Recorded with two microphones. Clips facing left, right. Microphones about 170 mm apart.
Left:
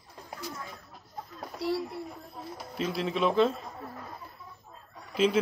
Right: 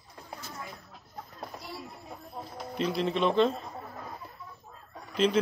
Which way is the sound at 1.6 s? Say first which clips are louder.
Left 14 dB; 75° left (ahead or behind).